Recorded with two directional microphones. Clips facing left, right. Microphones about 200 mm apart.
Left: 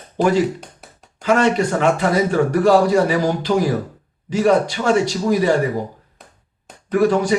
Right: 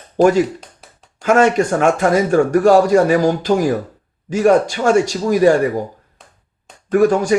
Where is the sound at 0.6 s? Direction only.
Centre (ahead or behind).